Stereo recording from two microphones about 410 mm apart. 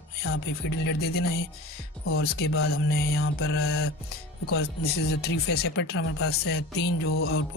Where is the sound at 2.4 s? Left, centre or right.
Left.